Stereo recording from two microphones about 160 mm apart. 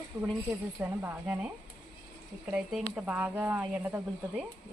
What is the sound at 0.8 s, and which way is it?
Speech, 15° right (ahead or behind).